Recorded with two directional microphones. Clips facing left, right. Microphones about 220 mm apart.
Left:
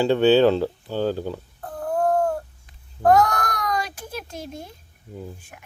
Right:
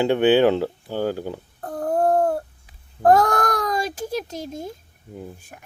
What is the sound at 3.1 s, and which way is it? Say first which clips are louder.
Baby cry: right 1 dB; 50° right (ahead or behind).